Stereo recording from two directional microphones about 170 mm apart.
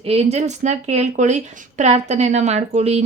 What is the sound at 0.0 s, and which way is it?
A woman's voice, 35° right (ahead or behind).